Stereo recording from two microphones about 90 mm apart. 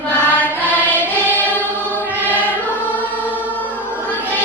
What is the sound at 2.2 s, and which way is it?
Choir, 20° left (ahead or behind).